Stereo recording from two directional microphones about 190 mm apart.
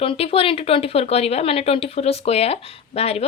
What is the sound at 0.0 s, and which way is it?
Speech, 30° left (ahead or behind).